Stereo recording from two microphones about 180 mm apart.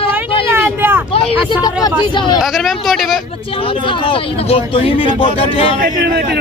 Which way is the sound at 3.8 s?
30° left (ahead or behind).